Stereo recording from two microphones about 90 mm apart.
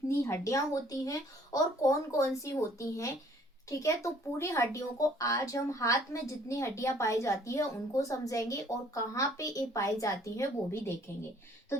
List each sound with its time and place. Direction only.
0.2 s a woman's voice: 30° left (ahead or behind)